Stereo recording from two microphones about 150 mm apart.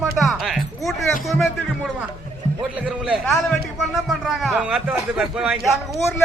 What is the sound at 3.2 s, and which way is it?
A man's voice, 5° left (ahead or behind).